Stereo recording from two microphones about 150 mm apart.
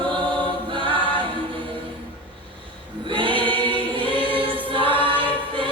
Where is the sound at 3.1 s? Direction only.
35° right (ahead or behind).